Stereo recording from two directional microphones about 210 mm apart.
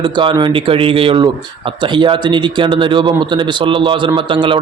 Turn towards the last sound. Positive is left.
turn(degrees=-25)  # may be behind; listen again after turning